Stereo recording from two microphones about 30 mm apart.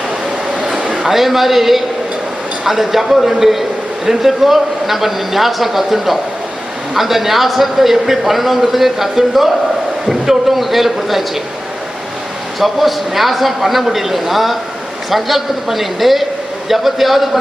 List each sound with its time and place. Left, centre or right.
0.6 s a sound: right
1.0 s a man's voice: centre
12.5 s a man's voice: centre